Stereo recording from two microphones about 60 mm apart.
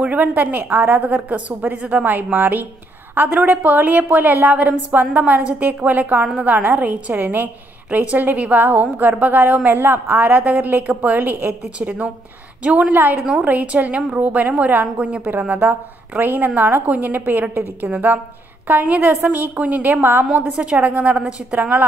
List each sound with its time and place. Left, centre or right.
0.0 s a woman's voice: right
13.2 s speech: centre
13.5 s a woman's voice: right
16.2 s a woman's voice: right
21.2 s speech: centre
21.5 s a woman's voice: right